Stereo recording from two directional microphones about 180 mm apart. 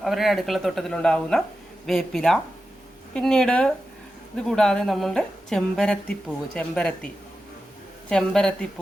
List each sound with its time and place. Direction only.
0.0 s a woman's voice: centre (ahead or behind)
8.1 s a woman's voice: 5° left (ahead or behind)